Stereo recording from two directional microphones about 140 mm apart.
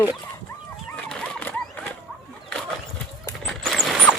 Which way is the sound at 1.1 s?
10° left (ahead or behind).